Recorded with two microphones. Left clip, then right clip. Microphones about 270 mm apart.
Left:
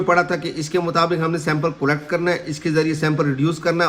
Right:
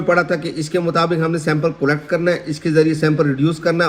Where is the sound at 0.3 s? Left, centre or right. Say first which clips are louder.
Right 3 dB; left.